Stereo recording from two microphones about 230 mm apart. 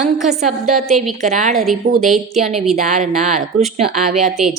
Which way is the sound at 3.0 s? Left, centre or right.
Right.